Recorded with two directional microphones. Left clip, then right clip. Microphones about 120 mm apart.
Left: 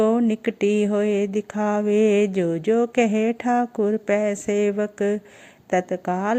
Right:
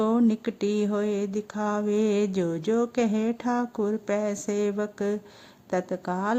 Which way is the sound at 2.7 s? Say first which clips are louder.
Left 6 dB; 15° left (ahead or behind).